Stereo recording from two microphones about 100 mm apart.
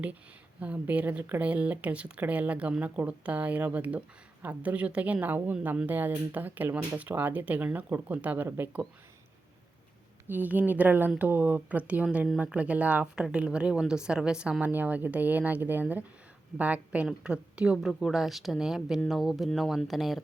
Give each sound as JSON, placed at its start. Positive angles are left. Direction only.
{"t": 0.6, "sound": "speech", "side_deg": -15}
{"t": 10.2, "sound": "speech", "side_deg": -15}